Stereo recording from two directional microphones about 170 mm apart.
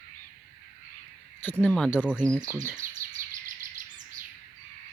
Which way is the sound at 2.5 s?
15° right (ahead or behind).